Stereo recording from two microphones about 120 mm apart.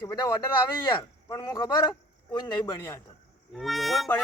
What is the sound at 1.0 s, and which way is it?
Speech, 35° left (ahead or behind).